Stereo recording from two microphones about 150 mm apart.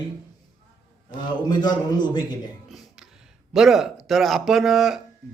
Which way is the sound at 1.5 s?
30° left (ahead or behind).